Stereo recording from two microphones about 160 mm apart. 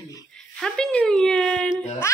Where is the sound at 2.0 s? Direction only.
15° left (ahead or behind).